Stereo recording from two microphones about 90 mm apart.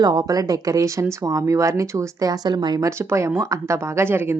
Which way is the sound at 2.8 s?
35° right (ahead or behind).